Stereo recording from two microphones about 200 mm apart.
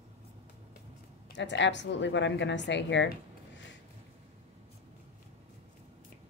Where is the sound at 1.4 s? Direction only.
65° left (ahead or behind).